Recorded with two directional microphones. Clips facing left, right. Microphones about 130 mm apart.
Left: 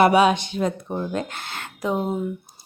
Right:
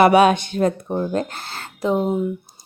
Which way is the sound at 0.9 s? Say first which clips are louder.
Right 4 dB; 30° right (ahead or behind).